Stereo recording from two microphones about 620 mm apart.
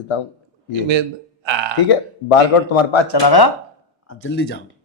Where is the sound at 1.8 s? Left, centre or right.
Left.